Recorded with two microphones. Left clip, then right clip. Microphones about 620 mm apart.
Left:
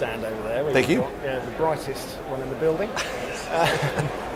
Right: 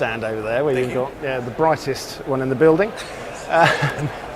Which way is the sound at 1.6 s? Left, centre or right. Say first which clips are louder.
Right 7 dB; right.